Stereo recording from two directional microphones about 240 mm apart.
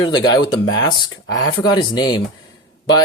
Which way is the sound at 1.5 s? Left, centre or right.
Centre.